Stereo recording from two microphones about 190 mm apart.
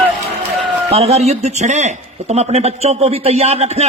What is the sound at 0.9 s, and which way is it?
A man's voice, 35° right (ahead or behind).